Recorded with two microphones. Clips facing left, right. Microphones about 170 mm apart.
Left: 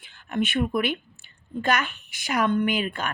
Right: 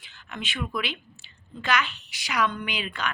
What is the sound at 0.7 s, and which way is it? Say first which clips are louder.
A woman's voice: left 6 dB; 55° left (ahead or behind).